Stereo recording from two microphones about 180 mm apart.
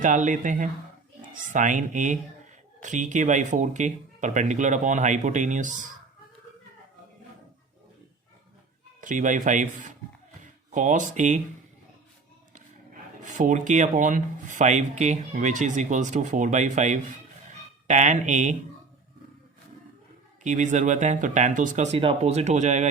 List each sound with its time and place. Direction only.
0.0 s speech: 45° right (ahead or behind)
9.0 s speech: 45° right (ahead or behind)
12.5 s speech: 45° right (ahead or behind)
20.4 s speech: 45° right (ahead or behind)